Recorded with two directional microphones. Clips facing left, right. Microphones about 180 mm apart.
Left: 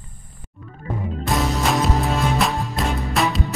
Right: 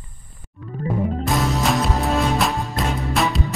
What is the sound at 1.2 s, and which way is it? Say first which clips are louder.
Music: left 2 dB; centre (ahead or behind).